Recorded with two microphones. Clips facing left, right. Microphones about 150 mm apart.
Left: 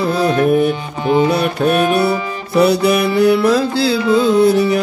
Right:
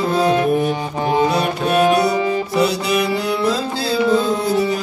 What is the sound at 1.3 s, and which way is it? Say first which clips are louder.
Music: left 3 dB; 55° left (ahead or behind).